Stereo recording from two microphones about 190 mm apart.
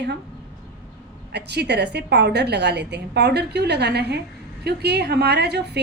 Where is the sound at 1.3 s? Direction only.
60° right (ahead or behind).